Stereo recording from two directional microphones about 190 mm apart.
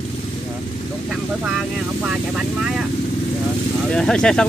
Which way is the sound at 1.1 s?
5° right (ahead or behind).